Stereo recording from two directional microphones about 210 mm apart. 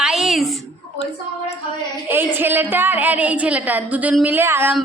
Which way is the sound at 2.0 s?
10° right (ahead or behind).